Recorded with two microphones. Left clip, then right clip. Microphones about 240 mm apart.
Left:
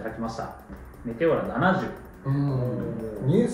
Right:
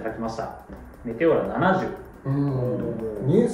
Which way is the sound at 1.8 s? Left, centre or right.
Centre.